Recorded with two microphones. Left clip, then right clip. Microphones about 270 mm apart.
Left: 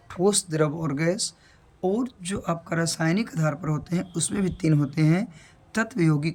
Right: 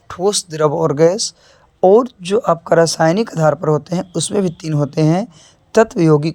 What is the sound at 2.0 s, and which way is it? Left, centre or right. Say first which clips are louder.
Speech: right 15 dB; centre.